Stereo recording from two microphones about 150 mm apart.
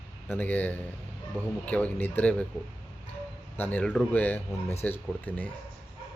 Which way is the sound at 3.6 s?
10° left (ahead or behind).